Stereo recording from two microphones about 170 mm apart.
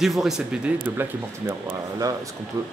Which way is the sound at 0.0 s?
Centre (ahead or behind).